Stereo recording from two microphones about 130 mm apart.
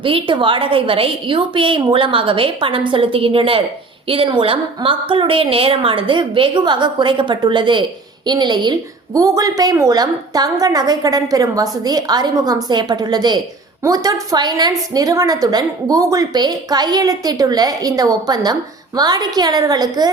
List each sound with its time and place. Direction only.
0.0 s a woman's voice: 40° right (ahead or behind)